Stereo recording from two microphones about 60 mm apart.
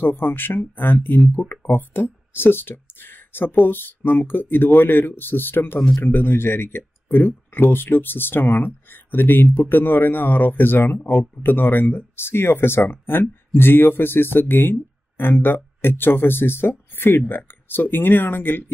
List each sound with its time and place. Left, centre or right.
0.0 s speech: left